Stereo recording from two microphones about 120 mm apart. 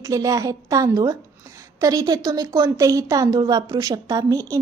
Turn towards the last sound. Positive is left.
turn(degrees=-30)  # may be behind; listen again after turning